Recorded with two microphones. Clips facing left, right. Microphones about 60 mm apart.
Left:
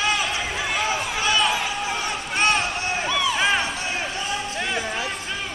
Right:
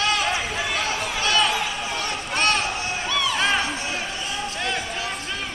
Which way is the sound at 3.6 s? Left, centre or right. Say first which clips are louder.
Even; left.